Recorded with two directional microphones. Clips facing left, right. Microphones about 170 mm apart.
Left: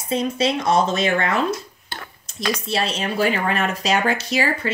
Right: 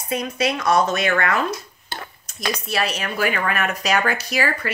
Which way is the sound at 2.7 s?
25° left (ahead or behind).